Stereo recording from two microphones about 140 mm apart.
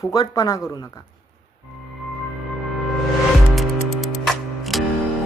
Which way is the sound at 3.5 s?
Centre (ahead or behind).